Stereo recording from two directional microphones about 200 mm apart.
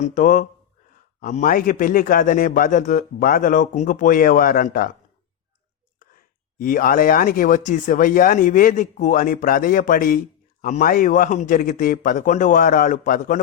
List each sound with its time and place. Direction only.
0.0 s a man's voice: 40° left (ahead or behind)
6.6 s a man's voice: 45° left (ahead or behind)